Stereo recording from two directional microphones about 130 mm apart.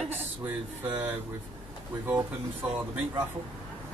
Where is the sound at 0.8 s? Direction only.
15° right (ahead or behind).